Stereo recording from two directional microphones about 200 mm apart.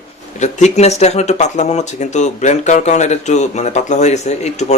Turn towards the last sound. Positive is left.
turn(degrees=35)  # may be behind; listen again after turning